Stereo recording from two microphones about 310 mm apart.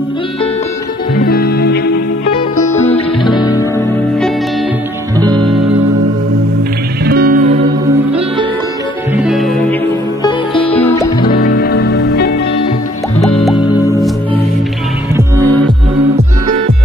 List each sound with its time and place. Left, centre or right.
1.1 s music: left
2.3 s music: centre
5.2 s music: centre
7.1 s music: right
9.1 s music: centre
11.2 s music: left